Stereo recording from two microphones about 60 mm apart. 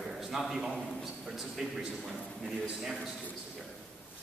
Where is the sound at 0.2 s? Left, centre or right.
Centre.